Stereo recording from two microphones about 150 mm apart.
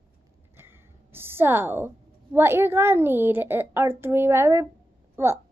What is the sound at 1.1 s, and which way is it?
A woman's voice, 15° right (ahead or behind).